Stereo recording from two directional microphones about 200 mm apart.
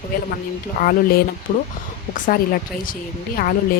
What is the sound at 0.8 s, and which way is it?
A woman's voice, 50° left (ahead or behind).